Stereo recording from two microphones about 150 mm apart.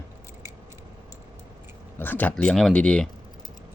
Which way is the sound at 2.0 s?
10° left (ahead or behind).